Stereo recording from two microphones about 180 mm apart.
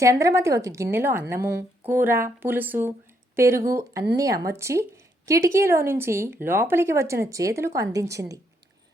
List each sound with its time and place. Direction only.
0.0 s a woman's voice: 15° right (ahead or behind)